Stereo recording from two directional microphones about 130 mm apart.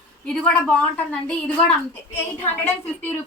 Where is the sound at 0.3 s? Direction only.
5° left (ahead or behind).